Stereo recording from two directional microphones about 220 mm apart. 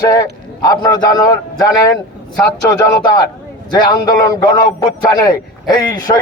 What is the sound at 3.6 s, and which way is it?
A man's voice, 20° left (ahead or behind).